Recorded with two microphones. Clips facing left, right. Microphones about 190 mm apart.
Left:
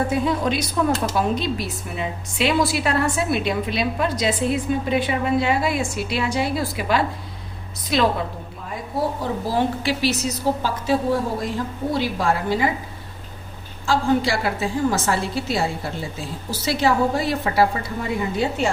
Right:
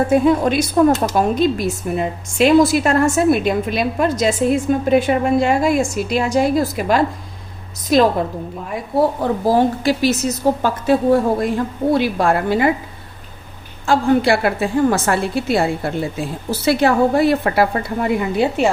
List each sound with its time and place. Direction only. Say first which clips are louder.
0.1 s speech: right 7 dB; 50° right (ahead or behind)
9.2 s a woman's voice: right 7 dB; 45° right (ahead or behind)
13.8 s a woman's voice: right 5 dB; 60° right (ahead or behind)